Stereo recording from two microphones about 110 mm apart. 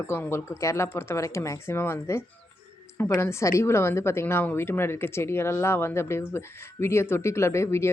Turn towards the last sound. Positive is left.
turn(degrees=25)  # may be behind; listen again after turning